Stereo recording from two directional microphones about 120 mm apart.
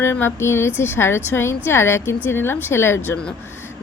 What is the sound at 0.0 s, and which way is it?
A woman's voice, 20° left (ahead or behind).